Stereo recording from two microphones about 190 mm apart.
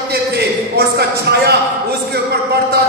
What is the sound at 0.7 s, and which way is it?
Speech, 60° right (ahead or behind).